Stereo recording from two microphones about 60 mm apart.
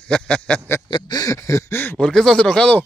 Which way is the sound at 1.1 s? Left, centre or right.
Left.